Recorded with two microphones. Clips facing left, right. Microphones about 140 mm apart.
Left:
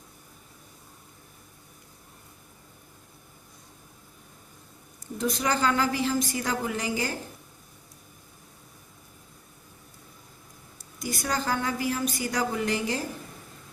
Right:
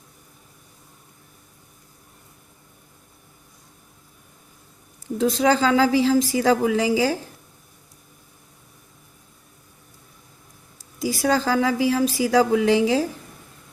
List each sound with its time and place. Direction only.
5.2 s a woman's voice: 90° right
11.1 s a woman's voice: 90° right